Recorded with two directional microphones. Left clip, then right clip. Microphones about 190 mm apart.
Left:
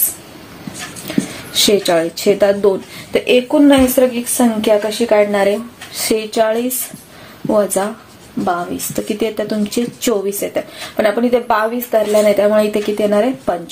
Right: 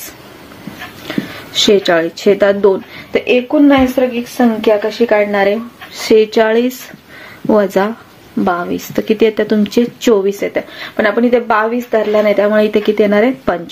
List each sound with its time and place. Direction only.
1.0 s a sound: 15° right (ahead or behind)
1.9 s a woman's voice: 15° right (ahead or behind)
6.3 s speech: 35° right (ahead or behind)
10.4 s a woman's voice: 15° right (ahead or behind)